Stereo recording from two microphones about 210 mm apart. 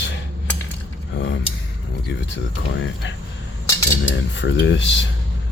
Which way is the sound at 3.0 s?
60° left (ahead or behind).